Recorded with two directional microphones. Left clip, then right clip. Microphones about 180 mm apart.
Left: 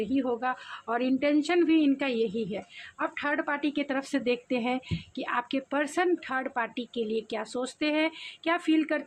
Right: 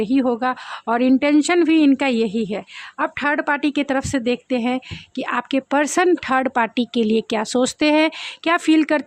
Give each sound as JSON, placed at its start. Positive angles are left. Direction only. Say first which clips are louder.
{"t": 0.0, "sound": "a woman's voice", "louder": "right 9 dB", "side_deg": -55}